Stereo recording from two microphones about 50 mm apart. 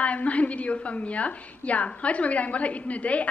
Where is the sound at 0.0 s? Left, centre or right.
Left.